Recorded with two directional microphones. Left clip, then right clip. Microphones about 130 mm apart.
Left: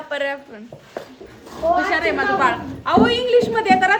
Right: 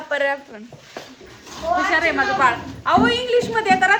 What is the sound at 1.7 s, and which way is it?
A woman's voice, centre (ahead or behind).